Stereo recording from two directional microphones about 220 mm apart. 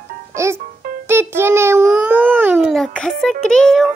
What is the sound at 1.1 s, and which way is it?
A child's voice, 10° right (ahead or behind).